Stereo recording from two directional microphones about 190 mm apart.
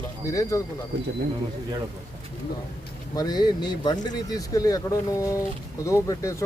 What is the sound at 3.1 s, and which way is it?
Speech, 20° left (ahead or behind).